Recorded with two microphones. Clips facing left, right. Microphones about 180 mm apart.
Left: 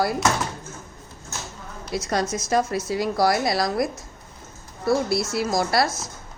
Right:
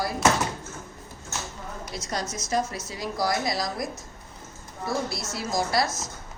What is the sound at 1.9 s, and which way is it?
A woman's voice, 60° left (ahead or behind).